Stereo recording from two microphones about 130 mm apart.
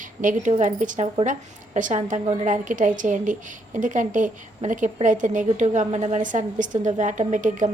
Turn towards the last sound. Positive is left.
turn(degrees=-80)